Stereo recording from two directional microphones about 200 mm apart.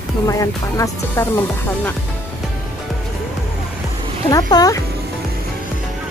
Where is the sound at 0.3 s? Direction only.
15° left (ahead or behind).